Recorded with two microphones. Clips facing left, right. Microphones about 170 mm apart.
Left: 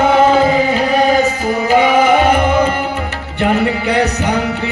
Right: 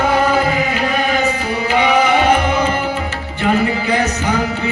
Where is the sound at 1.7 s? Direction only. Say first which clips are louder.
Left 3 dB; 45° left (ahead or behind).